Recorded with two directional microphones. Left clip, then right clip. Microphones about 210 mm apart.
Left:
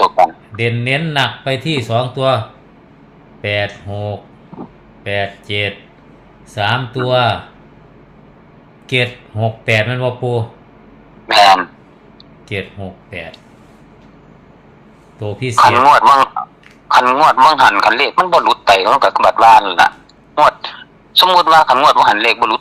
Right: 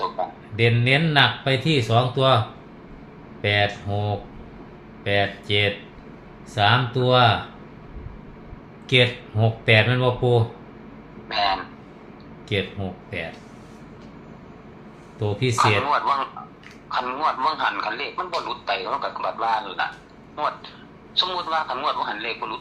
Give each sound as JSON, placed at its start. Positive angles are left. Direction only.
{"t": 0.5, "sound": "speech", "side_deg": 35}
{"t": 3.4, "sound": "speech", "side_deg": 35}
{"t": 8.9, "sound": "speech", "side_deg": 35}
{"t": 11.3, "sound": "a man's voice", "side_deg": 55}
{"t": 12.5, "sound": "speech", "side_deg": 35}
{"t": 15.2, "sound": "speech", "side_deg": 35}
{"t": 15.8, "sound": "a man's voice", "side_deg": 55}